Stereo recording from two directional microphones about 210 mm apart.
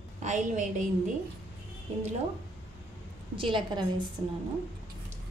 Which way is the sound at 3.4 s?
25° right (ahead or behind).